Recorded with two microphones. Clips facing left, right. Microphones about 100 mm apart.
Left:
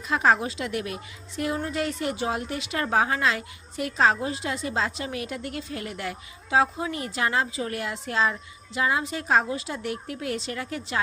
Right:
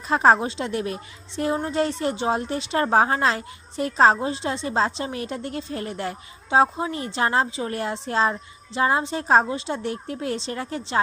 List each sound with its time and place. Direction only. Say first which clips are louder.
0.1 s a woman's voice: right 4 dB; 35° right (ahead or behind)